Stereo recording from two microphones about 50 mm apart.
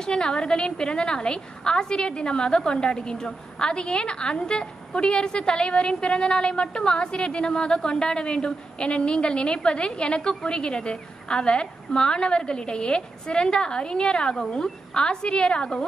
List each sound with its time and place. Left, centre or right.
0.0 s a woman's voice: centre